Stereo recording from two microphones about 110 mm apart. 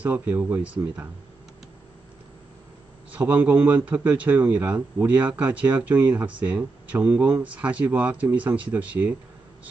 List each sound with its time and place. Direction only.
0.0 s speech: 15° right (ahead or behind)
3.1 s speech: 15° right (ahead or behind)